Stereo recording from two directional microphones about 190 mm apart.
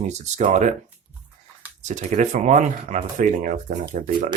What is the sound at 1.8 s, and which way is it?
Speech, 40° right (ahead or behind).